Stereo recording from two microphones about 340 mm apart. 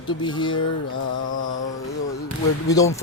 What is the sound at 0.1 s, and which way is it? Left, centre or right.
Speech, centre.